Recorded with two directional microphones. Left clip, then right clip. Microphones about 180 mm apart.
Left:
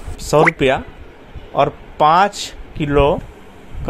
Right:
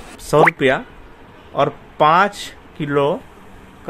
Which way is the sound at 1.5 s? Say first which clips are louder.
Left 2 dB; centre (ahead or behind).